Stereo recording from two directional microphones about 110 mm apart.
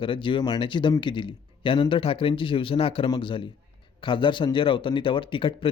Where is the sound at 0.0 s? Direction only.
50° left (ahead or behind).